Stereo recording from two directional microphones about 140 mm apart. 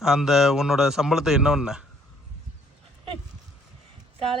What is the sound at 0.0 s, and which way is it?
Speech, 5° right (ahead or behind).